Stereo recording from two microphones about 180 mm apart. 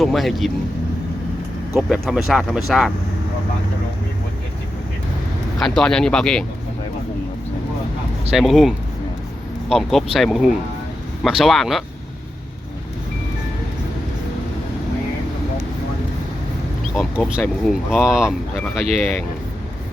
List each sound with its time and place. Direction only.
0.0 s speech: centre (ahead or behind)
1.7 s speech: centre (ahead or behind)
5.5 s speech: centre (ahead or behind)
8.3 s speech: centre (ahead or behind)
16.9 s speech: centre (ahead or behind)